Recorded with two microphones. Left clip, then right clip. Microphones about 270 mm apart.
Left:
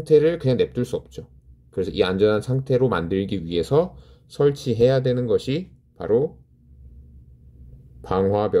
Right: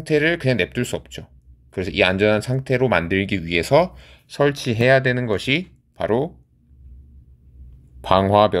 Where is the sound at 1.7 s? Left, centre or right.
Right.